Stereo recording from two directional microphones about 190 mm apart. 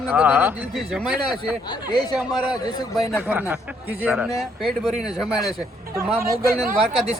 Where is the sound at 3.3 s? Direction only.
10° right (ahead or behind).